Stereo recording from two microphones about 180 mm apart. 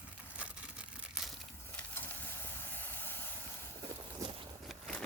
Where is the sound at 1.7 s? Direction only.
10° left (ahead or behind).